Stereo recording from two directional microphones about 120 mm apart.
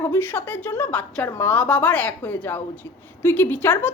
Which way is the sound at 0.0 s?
20° left (ahead or behind).